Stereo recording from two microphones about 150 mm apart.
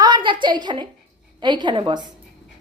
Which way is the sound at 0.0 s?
30° right (ahead or behind).